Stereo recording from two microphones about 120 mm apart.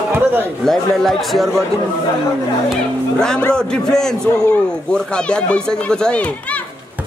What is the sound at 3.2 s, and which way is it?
Speech, 10° left (ahead or behind).